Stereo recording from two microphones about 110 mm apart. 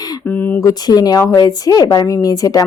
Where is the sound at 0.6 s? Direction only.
35° left (ahead or behind).